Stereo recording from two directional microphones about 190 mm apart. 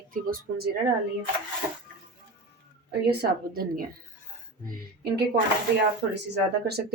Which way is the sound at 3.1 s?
50° right (ahead or behind).